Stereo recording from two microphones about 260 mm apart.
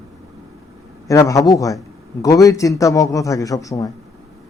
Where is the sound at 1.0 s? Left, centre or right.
Centre.